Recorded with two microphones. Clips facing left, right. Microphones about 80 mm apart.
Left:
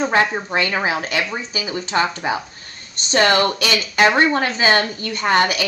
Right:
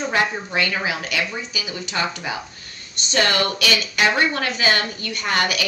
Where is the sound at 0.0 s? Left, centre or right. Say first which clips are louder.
Left 4 dB; left.